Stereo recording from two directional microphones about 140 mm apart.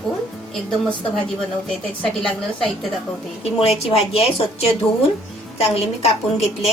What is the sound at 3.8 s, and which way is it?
A woman's voice, 45° left (ahead or behind).